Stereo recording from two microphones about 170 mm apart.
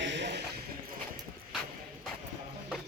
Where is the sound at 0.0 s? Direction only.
90° right.